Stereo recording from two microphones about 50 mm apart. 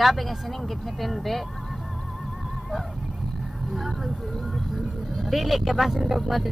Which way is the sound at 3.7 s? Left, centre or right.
Centre.